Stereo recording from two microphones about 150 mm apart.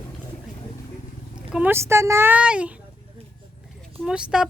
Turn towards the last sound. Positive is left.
turn(degrees=-5)  # may be behind; listen again after turning